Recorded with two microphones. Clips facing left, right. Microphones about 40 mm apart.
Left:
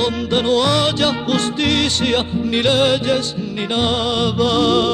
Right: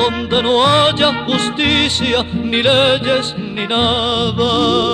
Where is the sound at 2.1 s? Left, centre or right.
Right.